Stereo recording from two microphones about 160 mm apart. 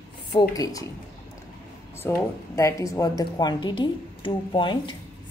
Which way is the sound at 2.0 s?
20° left (ahead or behind).